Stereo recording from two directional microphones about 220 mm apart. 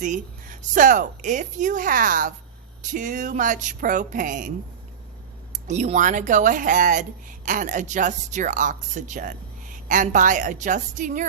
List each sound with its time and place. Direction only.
0.0 s a woman's voice: 35° right (ahead or behind)
5.5 s a woman's voice: 30° right (ahead or behind)